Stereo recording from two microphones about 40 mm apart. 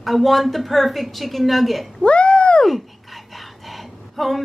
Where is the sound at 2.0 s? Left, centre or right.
Left.